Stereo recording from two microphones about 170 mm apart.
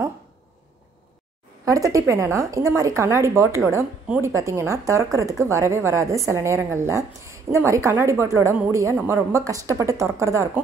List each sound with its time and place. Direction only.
1.7 s a woman's voice: 20° right (ahead or behind)